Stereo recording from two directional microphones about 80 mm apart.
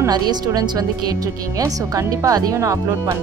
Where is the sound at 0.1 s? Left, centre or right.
Right.